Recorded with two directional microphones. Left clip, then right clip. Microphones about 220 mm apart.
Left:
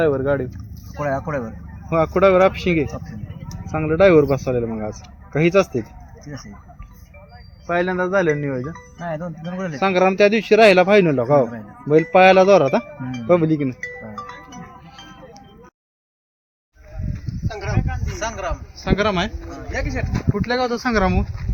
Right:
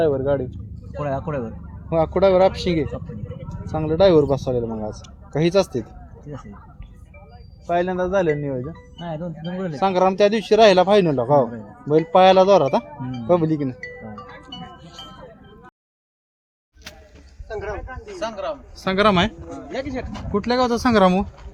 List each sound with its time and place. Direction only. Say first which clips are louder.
0.0 s a man's voice: left 1 dB; 20° left (ahead or behind)
0.5 s speech: even; 10° right (ahead or behind)
1.9 s a man's voice: left 2 dB; 20° left (ahead or behind)
6.3 s speech: even; 10° right (ahead or behind)
7.7 s a man's voice: left 1 dB; 25° left (ahead or behind)
8.7 s a man's voice: left 4 dB; centre (ahead or behind)
9.8 s a man's voice: left 1 dB; 20° left (ahead or behind)
13.8 s music: left 4 dB; 5° left (ahead or behind)
17.5 s a sound: left 1 dB; 35° left (ahead or behind)
18.2 s a man's voice: left 1 dB; 5° left (ahead or behind)
18.8 s a man's voice: right 3 dB; 50° right (ahead or behind)
19.5 s speech: left 1 dB; 5° right (ahead or behind)
20.3 s speech: right 2 dB; 55° right (ahead or behind)